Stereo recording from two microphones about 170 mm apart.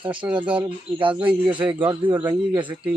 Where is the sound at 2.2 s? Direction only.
25° right (ahead or behind).